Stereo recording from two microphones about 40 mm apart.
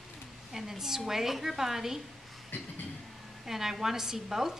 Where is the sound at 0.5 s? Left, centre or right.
Centre.